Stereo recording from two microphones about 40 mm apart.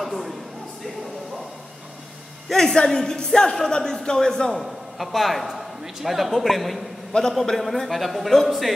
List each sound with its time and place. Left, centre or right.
0.0 s a sound: centre
2.5 s speech: centre
4.6 s a woman's voice: centre